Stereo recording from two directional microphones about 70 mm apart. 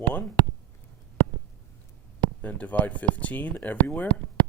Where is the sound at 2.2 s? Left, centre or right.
Left.